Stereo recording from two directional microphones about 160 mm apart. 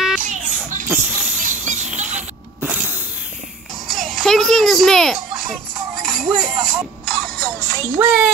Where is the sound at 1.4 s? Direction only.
50° right (ahead or behind).